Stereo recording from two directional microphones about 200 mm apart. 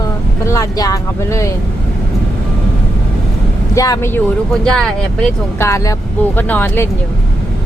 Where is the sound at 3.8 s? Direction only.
15° left (ahead or behind).